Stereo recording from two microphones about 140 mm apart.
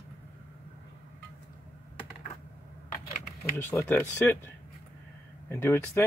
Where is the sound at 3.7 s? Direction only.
10° left (ahead or behind).